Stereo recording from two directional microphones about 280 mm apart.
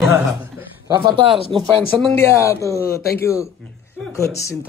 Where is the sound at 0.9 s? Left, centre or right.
Centre.